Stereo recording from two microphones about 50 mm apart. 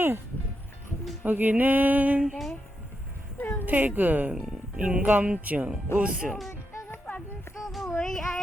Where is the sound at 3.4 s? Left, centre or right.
Left.